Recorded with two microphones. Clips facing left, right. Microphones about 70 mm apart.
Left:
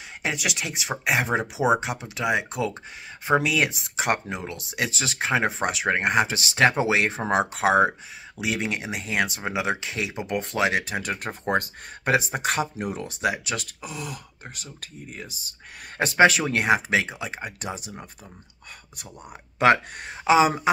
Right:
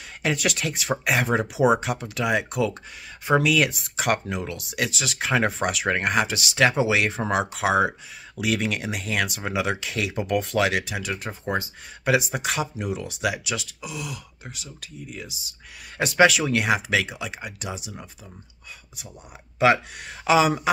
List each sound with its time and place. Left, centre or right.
0.2 s speech: centre; by 5.3 s left
5.3 s speech: left
8.4 s speech: left
12.1 s speech: left
19.6 s speech: left
20.1 s speech: left